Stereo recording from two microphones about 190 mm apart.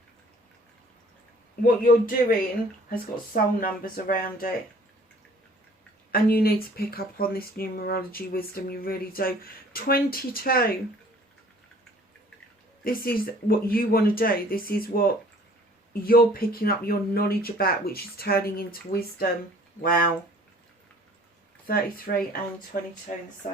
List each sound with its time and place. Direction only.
1.6 s speech: 45° left (ahead or behind)
6.1 s speech: 50° left (ahead or behind)
12.8 s speech: 50° left (ahead or behind)
21.7 s speech: 50° left (ahead or behind)